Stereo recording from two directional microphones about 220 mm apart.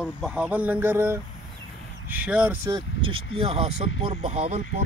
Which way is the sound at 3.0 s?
25° right (ahead or behind).